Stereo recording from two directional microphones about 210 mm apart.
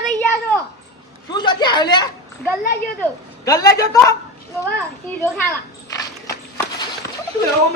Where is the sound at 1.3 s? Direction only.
20° left (ahead or behind).